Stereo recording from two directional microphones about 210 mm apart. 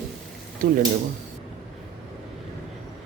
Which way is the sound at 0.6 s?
40° right (ahead or behind).